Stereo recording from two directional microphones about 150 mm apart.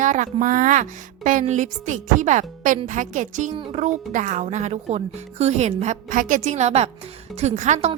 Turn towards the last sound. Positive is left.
turn(degrees=-55)  # may be behind; listen again after turning